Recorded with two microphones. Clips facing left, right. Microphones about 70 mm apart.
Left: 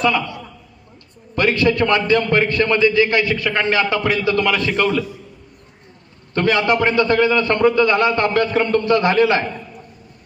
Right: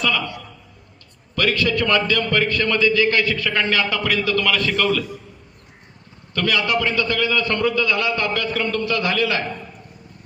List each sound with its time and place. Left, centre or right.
1.4 s a man's voice: left
6.3 s a man's voice: left